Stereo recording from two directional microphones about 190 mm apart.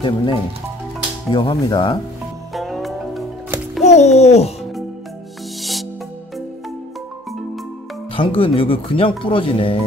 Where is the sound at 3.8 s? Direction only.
35° left (ahead or behind).